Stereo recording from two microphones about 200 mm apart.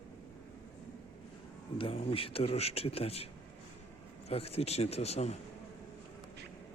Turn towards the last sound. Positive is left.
turn(degrees=35)  # may be behind; listen again after turning